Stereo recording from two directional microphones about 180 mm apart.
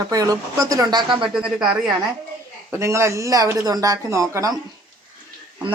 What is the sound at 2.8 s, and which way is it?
A woman's voice, 15° right (ahead or behind).